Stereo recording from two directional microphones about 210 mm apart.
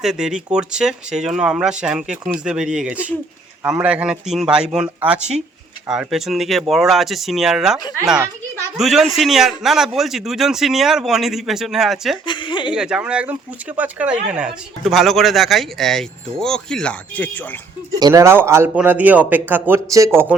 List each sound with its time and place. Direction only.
0.0 s speech: 5° right (ahead or behind)
12.2 s a woman's voice: 25° left (ahead or behind)
12.7 s speech: 5° right (ahead or behind)
18.0 s a man's voice: 15° right (ahead or behind)